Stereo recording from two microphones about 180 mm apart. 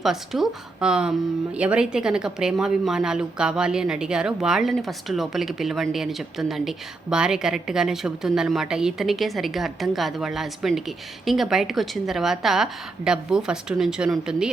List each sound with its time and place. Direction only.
0.0 s a woman's voice: centre (ahead or behind)